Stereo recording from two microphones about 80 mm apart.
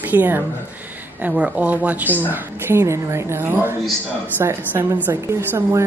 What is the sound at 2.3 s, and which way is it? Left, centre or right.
Speech, right.